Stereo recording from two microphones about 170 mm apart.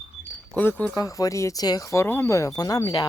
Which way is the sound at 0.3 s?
10° left (ahead or behind).